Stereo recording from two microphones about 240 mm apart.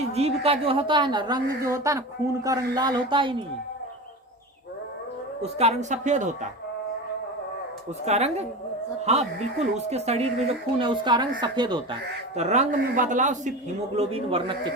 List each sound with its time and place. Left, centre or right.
0.1 s a woman's voice: right
5.4 s a woman's voice: right
8.0 s a woman's voice: right
12.4 s a woman's voice: right